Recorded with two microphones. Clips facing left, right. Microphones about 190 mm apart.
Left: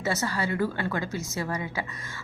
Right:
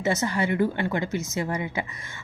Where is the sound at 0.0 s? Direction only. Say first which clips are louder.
Right 4 dB; 20° right (ahead or behind).